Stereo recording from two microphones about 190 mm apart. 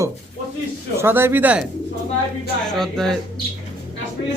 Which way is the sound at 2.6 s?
Centre (ahead or behind).